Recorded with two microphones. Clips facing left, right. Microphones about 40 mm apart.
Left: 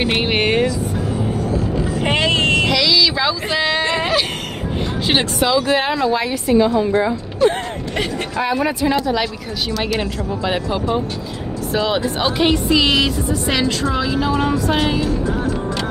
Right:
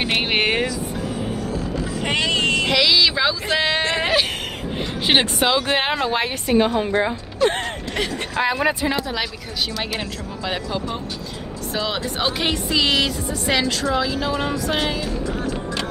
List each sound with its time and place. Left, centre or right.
0.0 s music: centre
2.0 s vehicle: left
2.7 s a sound: centre
3.5 s a sound: centre
5.0 s speech: right
8.4 s speech: right
9.0 s speech: centre
9.9 s speech: centre